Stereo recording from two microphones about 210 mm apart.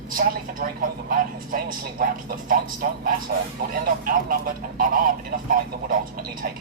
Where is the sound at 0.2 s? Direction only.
40° right (ahead or behind).